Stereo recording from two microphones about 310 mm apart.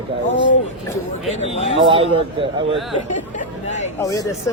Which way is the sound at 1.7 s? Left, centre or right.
Centre.